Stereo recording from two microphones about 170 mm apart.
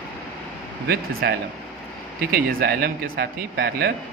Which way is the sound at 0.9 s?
70° right (ahead or behind).